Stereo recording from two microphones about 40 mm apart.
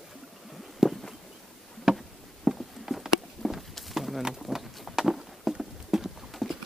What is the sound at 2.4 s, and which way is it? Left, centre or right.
Clip-clop, centre.